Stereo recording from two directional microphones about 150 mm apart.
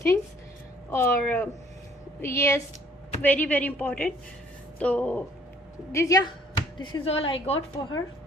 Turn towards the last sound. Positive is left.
turn(degrees=40)  # may be behind; listen again after turning